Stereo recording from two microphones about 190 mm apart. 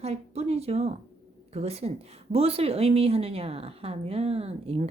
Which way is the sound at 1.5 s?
35° right (ahead or behind).